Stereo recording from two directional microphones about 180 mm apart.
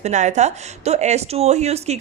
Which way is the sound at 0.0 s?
40° right (ahead or behind).